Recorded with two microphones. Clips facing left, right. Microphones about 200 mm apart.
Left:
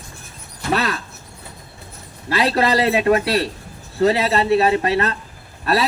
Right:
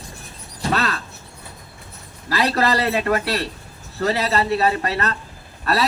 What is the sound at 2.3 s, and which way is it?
Speech, 20° left (ahead or behind).